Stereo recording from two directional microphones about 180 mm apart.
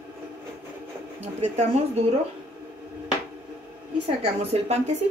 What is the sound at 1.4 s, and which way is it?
Speech, 35° right (ahead or behind).